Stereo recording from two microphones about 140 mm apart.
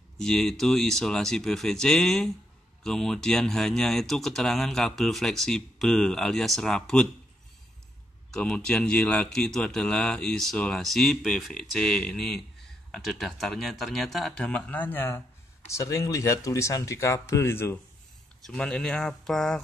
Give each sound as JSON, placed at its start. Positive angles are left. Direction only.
{"t": 0.2, "sound": "speech", "side_deg": 5}
{"t": 8.3, "sound": "speech", "side_deg": 5}
{"t": 18.4, "sound": "speech", "side_deg": 5}